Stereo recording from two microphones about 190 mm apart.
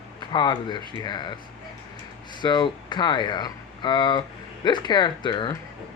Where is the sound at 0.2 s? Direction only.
25° left (ahead or behind).